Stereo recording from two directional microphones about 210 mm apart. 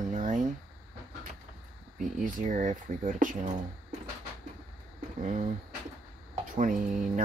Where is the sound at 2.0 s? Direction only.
40° right (ahead or behind).